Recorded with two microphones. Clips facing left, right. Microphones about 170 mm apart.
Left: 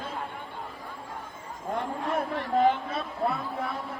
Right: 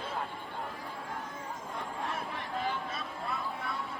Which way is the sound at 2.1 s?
55° left (ahead or behind).